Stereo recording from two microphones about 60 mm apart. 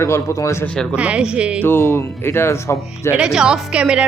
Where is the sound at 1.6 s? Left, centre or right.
Left.